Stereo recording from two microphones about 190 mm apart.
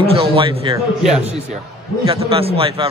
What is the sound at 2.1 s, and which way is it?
Speech, 30° right (ahead or behind).